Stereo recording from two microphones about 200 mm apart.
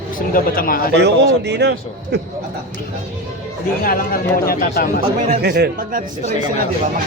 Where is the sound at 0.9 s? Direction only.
60° right (ahead or behind).